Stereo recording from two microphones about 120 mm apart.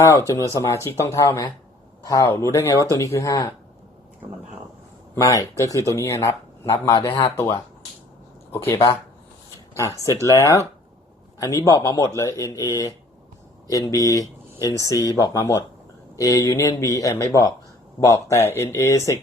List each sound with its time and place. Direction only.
0.0 s speech: 25° left (ahead or behind)
5.1 s speech: 25° left (ahead or behind)
8.6 s speech: 20° left (ahead or behind)